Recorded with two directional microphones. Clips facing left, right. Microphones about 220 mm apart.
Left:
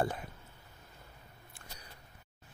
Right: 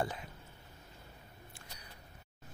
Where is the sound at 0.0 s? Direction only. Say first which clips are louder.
Left 3 dB; 55° left (ahead or behind).